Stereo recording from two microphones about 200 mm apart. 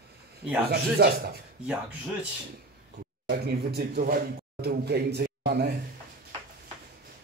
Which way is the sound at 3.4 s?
50° right (ahead or behind).